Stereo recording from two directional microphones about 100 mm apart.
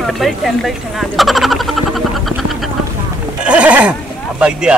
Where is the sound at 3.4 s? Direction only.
10° right (ahead or behind).